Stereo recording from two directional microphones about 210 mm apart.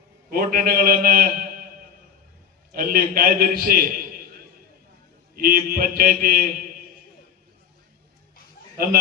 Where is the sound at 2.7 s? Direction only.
45° right (ahead or behind).